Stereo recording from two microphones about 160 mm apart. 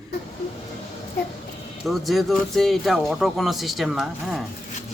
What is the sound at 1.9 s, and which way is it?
Speech, centre (ahead or behind).